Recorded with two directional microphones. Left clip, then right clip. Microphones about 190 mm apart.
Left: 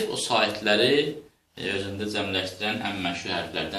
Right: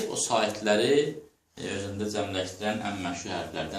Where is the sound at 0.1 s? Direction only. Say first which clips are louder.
Left 1 dB; 20° right (ahead or behind).